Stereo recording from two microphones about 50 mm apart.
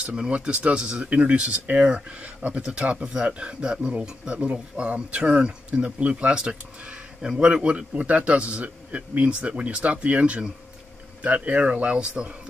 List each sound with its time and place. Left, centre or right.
0.0 s speech: right